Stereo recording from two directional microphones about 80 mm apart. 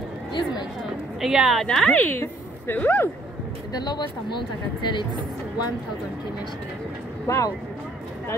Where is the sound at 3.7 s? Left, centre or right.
Left.